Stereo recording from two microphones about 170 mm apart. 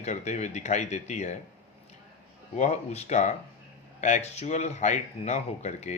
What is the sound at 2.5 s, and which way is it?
Speech, 40° left (ahead or behind).